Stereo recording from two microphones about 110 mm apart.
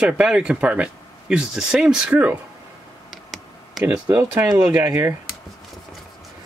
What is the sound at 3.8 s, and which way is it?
Speech, 15° right (ahead or behind).